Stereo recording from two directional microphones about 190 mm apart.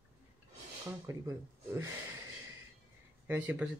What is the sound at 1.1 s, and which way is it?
Speech, 15° right (ahead or behind).